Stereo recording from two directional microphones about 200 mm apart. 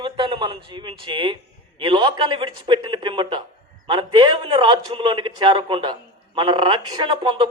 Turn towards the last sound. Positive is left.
turn(degrees=-25)  # may be behind; listen again after turning